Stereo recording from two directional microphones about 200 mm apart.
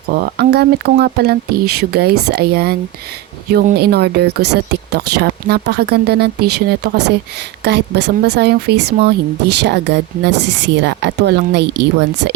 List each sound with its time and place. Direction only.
0.1 s speech: 55° right (ahead or behind)